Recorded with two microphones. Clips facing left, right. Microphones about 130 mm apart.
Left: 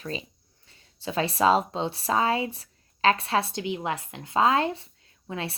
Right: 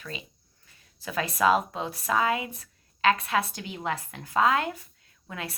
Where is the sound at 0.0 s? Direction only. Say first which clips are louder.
Left 6 dB; 35° left (ahead or behind).